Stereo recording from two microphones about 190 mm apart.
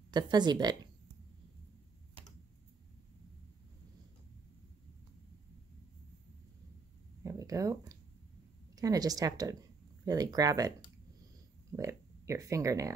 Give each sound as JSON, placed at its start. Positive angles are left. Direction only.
{"t": 0.1, "sound": "speech", "side_deg": -20}
{"t": 7.2, "sound": "a sound", "side_deg": -15}
{"t": 8.7, "sound": "speech", "side_deg": -20}
{"t": 11.7, "sound": "speech", "side_deg": -15}